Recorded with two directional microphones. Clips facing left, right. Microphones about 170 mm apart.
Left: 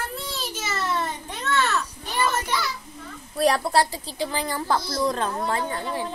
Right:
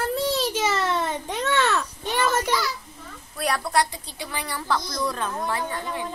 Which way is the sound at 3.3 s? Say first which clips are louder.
Left 4 dB; 35° left (ahead or behind).